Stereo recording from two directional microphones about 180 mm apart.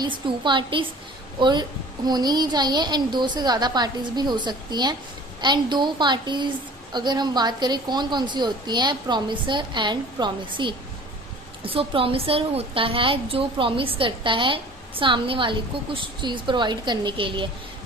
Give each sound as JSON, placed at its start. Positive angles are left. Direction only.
{"t": 0.0, "sound": "a woman's voice", "side_deg": -25}